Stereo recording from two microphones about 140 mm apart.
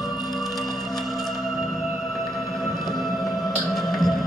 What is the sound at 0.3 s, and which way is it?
Music, centre (ahead or behind).